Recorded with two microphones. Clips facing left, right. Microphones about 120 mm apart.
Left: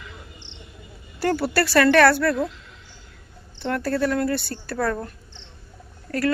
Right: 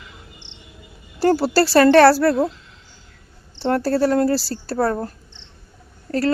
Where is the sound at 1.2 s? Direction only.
30° right (ahead or behind).